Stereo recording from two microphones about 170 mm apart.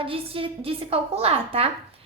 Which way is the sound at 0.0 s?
35° right (ahead or behind).